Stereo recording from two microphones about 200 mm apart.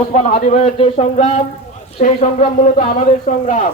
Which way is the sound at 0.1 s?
35° left (ahead or behind).